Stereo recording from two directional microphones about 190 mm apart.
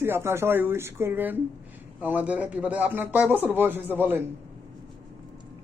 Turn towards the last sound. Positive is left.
turn(degrees=-10)  # may be behind; listen again after turning